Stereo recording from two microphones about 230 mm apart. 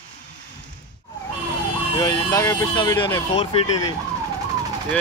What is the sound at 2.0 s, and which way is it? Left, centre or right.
Speech, centre.